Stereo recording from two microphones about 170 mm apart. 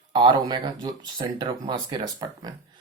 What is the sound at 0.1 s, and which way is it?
Speech, 30° right (ahead or behind).